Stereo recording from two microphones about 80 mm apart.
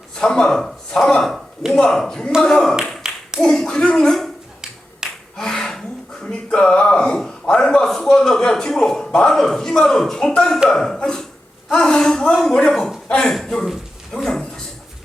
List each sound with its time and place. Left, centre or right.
0.2 s a man's voice: centre
3.1 s clapping: centre
3.4 s speech: centre
5.0 s finger snapping: centre
5.4 s a sound: centre
6.2 s a man's voice: centre
14.3 s a sound: centre